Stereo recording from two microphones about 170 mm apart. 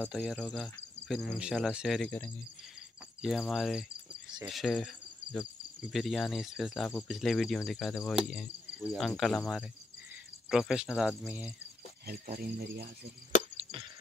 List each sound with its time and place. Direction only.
0.1 s cricket: 5° right (ahead or behind)
3.2 s cricket: centre (ahead or behind)
12.4 s speech: 60° right (ahead or behind)
13.6 s splinter: 30° right (ahead or behind)